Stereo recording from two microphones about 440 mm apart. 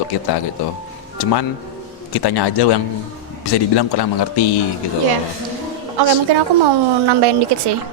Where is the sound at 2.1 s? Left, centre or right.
Left.